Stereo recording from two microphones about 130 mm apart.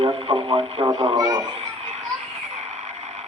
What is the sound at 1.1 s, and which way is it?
Speech, 30° right (ahead or behind).